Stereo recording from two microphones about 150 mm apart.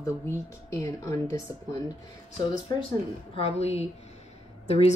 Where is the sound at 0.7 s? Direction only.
20° left (ahead or behind).